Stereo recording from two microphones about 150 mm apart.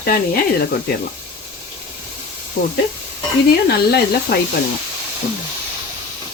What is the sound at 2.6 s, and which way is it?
Speech, 65° left (ahead or behind).